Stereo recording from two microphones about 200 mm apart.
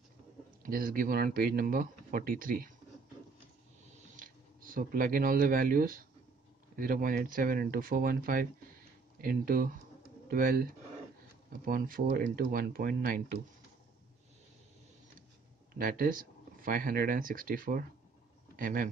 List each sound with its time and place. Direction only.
0.6 s speech: 45° right (ahead or behind)
4.2 s speech: 45° right (ahead or behind)
15.8 s speech: 45° right (ahead or behind)